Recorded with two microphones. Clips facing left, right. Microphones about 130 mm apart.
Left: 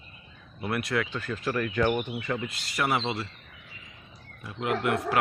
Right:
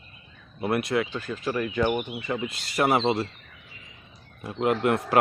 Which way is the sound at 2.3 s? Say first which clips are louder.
Right 3 dB; 20° right (ahead or behind).